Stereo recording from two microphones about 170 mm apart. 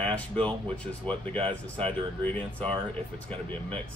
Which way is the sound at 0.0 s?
5° left (ahead or behind).